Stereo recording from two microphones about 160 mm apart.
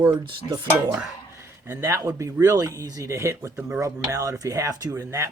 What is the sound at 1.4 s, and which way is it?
Speech, 15° right (ahead or behind).